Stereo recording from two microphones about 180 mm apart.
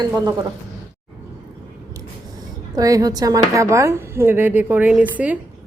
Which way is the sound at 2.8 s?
20° right (ahead or behind).